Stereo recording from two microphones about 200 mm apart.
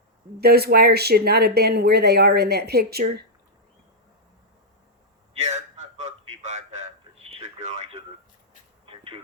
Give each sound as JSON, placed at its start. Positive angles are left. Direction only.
{"t": 0.3, "sound": "speech", "side_deg": -50}
{"t": 5.3, "sound": "a sound", "side_deg": -35}
{"t": 7.3, "sound": "radio", "side_deg": -30}